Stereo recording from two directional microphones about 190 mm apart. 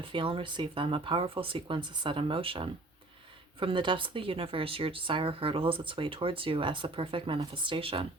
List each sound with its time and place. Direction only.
0.0 s speech: 30° right (ahead or behind)